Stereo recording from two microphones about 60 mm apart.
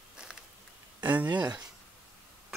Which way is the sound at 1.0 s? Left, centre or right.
Right.